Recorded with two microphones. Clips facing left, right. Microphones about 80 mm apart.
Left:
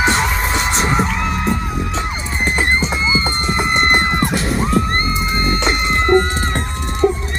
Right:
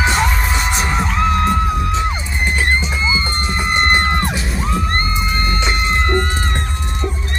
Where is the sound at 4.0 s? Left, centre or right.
Centre.